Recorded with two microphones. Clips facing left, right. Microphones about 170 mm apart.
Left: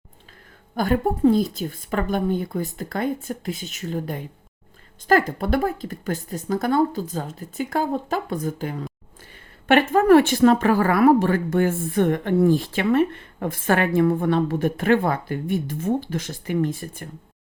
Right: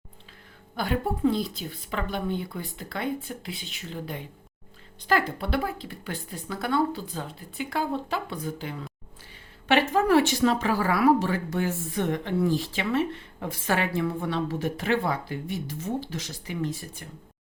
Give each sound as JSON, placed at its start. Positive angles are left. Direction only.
{"t": 0.8, "sound": "speech", "side_deg": 45}